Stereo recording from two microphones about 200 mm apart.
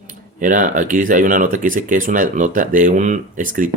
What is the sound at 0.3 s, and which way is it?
Speech, 40° right (ahead or behind).